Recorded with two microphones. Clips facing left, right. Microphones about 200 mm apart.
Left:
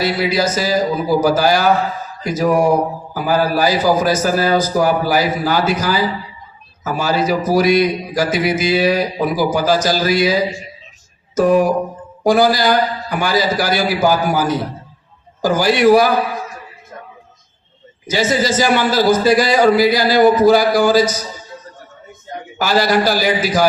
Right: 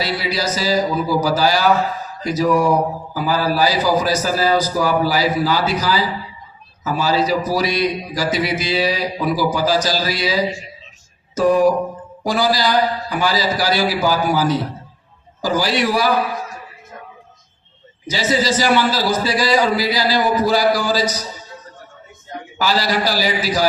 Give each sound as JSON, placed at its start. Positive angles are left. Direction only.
{"t": 0.0, "sound": "a man's voice", "side_deg": 50}
{"t": 11.3, "sound": "a man's voice", "side_deg": 50}
{"t": 18.1, "sound": "a man's voice", "side_deg": 50}
{"t": 22.5, "sound": "a man's voice", "side_deg": 50}